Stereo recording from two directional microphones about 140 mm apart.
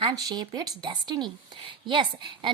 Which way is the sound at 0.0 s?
30° right (ahead or behind).